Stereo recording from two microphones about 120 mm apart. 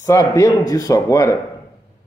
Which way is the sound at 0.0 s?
25° left (ahead or behind).